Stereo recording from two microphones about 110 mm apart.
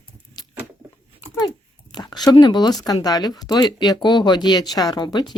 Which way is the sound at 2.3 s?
45° left (ahead or behind).